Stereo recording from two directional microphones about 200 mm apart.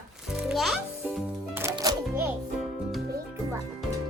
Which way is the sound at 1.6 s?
20° right (ahead or behind).